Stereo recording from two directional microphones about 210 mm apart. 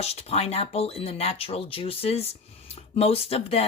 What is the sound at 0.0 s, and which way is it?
Speech, 30° left (ahead or behind).